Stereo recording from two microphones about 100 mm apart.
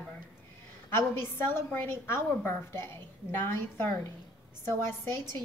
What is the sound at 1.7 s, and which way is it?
A woman's voice, 20° left (ahead or behind).